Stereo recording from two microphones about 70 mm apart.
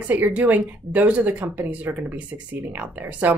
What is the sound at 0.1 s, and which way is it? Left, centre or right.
Speech, right.